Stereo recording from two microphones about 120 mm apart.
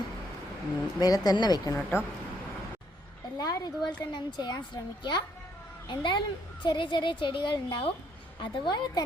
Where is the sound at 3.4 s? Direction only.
30° left (ahead or behind).